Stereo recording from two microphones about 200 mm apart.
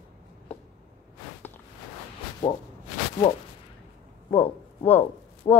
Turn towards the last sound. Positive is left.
turn(degrees=25)  # may be behind; listen again after turning